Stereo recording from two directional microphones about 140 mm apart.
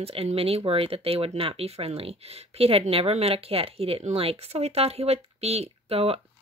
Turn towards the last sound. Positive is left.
turn(degrees=-45)  # may be behind; listen again after turning